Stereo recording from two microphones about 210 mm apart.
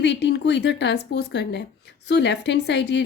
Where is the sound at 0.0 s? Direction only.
55° left (ahead or behind).